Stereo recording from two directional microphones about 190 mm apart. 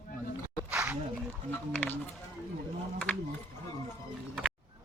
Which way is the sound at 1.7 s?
10° left (ahead or behind).